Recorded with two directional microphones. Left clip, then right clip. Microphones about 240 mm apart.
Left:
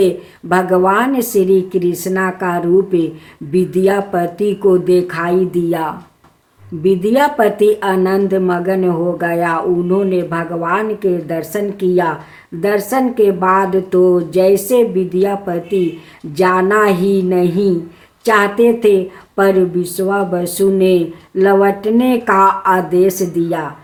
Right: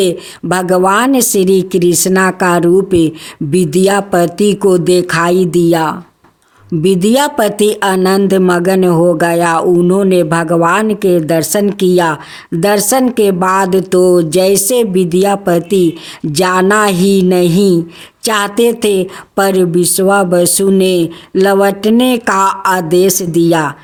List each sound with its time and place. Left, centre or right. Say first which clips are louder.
0.0 s speech: right 1 dB; right